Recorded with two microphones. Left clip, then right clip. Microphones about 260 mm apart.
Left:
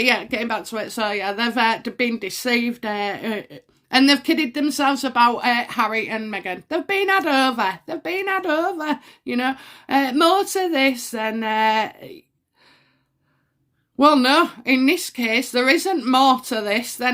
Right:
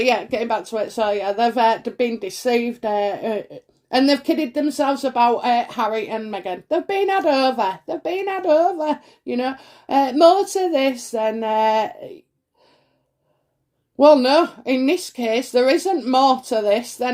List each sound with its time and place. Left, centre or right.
0.0 s speech: left
14.0 s speech: left